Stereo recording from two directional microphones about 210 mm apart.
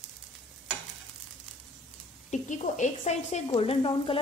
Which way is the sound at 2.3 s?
35° left (ahead or behind).